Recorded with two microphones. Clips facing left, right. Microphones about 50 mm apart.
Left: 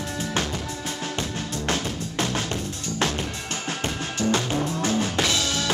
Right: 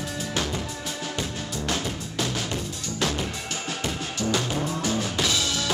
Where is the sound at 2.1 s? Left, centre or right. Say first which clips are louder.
Left 3 dB; left.